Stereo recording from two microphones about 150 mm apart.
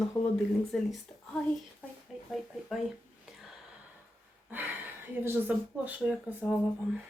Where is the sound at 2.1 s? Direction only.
5° right (ahead or behind).